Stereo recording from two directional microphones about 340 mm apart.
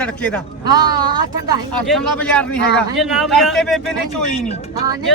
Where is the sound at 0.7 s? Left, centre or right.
Centre.